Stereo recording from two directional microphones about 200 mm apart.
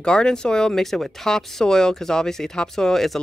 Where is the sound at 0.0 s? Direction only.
5° left (ahead or behind).